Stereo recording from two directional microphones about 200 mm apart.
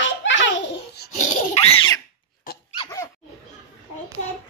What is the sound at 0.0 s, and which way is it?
Baby laughter, 65° left (ahead or behind).